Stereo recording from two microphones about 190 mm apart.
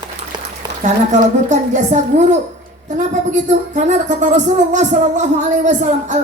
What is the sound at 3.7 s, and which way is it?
Speech, 40° right (ahead or behind).